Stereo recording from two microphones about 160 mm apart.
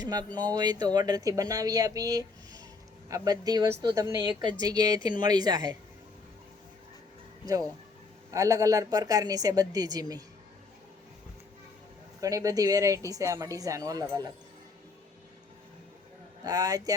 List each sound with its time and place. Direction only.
0.0 s speech: 25° right (ahead or behind)
8.3 s speech: 20° right (ahead or behind)
12.2 s speech: 20° right (ahead or behind)
16.4 s speech: 25° right (ahead or behind)